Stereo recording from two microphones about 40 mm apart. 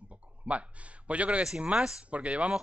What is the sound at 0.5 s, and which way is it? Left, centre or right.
Speech, right.